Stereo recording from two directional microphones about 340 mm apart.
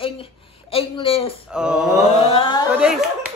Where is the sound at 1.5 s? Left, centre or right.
Centre.